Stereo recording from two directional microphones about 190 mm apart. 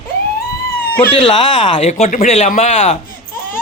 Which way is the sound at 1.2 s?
25° left (ahead or behind).